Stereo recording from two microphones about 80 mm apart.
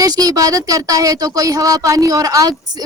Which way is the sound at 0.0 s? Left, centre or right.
Right.